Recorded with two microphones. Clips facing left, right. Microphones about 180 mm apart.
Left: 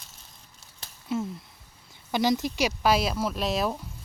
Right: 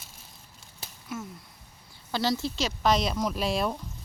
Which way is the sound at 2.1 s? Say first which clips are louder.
Left 3 dB; 15° left (ahead or behind).